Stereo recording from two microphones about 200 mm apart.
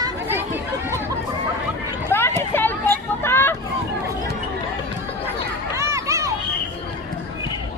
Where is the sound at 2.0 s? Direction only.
10° left (ahead or behind).